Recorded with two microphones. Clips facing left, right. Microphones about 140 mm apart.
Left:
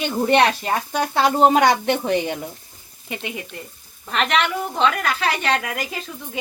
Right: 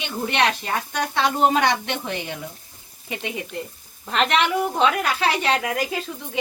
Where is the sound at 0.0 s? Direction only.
40° left (ahead or behind).